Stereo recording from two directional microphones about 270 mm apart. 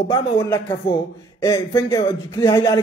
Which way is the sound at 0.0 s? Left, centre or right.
Centre.